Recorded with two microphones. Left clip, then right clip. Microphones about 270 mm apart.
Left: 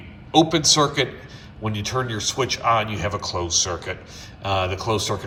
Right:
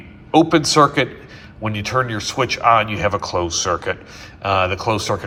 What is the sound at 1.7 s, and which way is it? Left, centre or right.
Speech, centre.